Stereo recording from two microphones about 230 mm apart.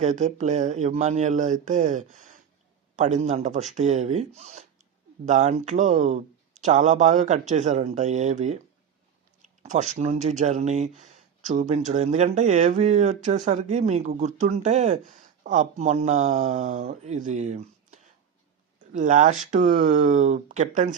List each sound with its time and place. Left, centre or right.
0.0 s speech: right